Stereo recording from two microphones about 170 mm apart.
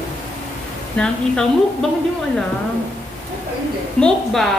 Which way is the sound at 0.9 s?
5° left (ahead or behind).